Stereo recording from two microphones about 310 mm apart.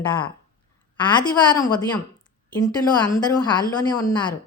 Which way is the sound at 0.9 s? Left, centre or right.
Centre.